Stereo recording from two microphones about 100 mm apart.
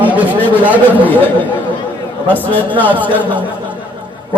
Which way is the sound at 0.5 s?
15° right (ahead or behind).